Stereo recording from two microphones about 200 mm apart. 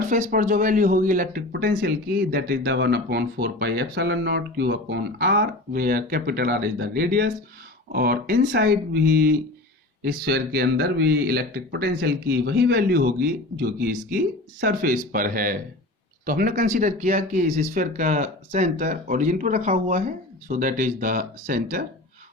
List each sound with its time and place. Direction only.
0.1 s speech: 40° right (ahead or behind)